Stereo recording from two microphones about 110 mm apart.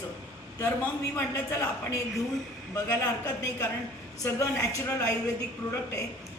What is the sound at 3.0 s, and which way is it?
Speech, 30° left (ahead or behind).